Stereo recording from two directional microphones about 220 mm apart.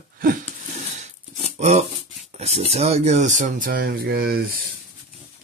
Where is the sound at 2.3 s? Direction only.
30° right (ahead or behind).